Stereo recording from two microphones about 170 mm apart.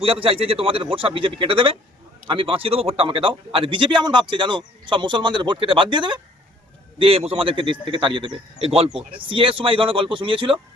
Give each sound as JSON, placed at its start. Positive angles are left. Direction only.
{"t": 0.0, "sound": "a man's voice", "side_deg": -35}